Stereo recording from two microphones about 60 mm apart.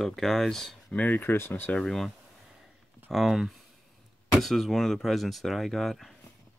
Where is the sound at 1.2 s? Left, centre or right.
Left.